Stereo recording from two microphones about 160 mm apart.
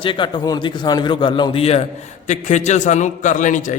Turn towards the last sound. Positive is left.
turn(degrees=50)  # may be behind; listen again after turning